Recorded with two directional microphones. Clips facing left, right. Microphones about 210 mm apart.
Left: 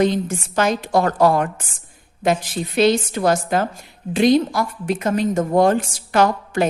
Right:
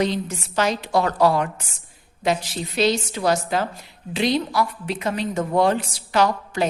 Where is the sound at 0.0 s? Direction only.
50° left (ahead or behind).